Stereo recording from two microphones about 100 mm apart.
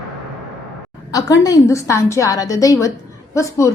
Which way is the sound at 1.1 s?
35° left (ahead or behind).